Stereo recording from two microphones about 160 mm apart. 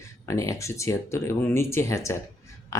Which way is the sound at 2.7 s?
20° left (ahead or behind).